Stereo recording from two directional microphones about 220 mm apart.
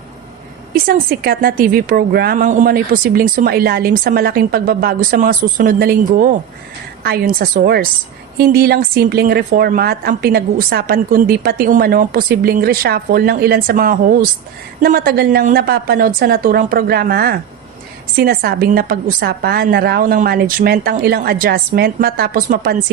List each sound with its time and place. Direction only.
0.7 s a woman's voice: 45° right (ahead or behind)